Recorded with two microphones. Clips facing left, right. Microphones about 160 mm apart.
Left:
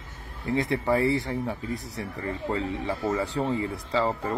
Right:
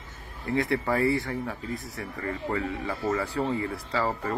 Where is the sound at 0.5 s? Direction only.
20° left (ahead or behind).